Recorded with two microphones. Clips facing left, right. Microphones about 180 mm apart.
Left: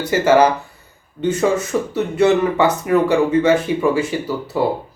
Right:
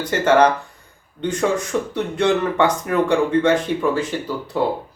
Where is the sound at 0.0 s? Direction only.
5° left (ahead or behind).